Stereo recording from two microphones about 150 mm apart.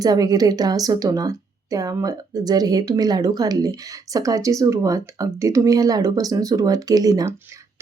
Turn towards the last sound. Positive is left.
turn(degrees=-25)  # may be behind; listen again after turning